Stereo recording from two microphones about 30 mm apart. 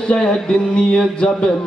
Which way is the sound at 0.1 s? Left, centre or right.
Left.